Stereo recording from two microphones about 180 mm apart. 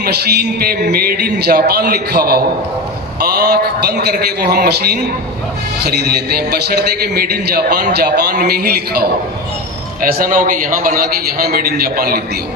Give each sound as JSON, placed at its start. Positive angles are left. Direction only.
{"t": 0.0, "sound": "a man's voice", "side_deg": -60}